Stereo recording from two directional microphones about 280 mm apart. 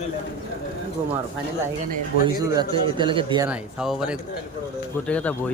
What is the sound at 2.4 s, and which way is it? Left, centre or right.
A man's voice, centre.